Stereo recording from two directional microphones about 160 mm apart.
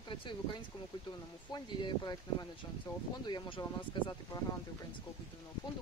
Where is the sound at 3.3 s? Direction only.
30° left (ahead or behind).